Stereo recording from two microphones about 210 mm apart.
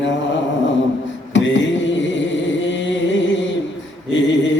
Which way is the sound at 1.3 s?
60° left (ahead or behind).